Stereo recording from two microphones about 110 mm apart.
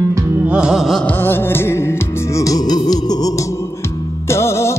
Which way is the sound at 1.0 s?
20° left (ahead or behind).